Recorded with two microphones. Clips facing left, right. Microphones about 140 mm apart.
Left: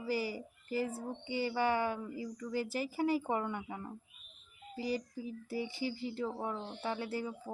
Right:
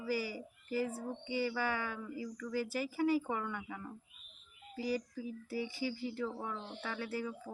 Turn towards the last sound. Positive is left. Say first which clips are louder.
# left 1 dB
turn(degrees=25)  # may be behind; listen again after turning